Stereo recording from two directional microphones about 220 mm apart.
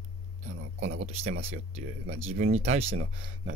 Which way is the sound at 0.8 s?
60° right (ahead or behind).